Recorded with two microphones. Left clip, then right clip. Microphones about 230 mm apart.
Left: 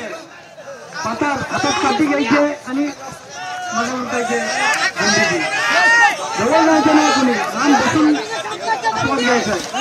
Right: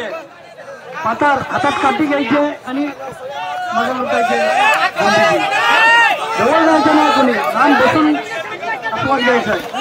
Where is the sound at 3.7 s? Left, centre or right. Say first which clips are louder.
Right 5 dB; right.